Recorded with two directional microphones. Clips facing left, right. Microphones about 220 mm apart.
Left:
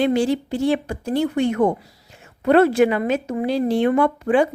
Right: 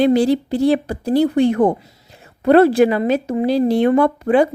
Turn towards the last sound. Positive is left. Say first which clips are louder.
# right 3 dB
turn(degrees=-40)  # may be behind; listen again after turning